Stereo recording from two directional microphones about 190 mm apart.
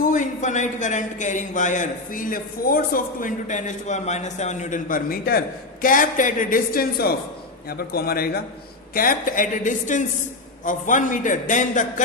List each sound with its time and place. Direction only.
0.0 s a man's voice: 40° left (ahead or behind)